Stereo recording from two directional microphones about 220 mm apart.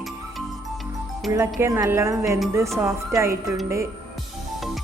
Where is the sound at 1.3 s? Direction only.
15° right (ahead or behind).